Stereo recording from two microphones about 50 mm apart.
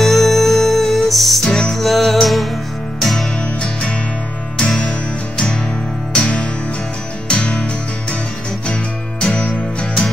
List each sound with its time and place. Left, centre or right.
0.0 s music: centre
4.6 s music: centre
6.1 s music: left
9.3 s music: left